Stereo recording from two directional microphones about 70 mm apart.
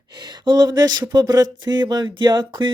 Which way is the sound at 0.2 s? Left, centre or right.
Right.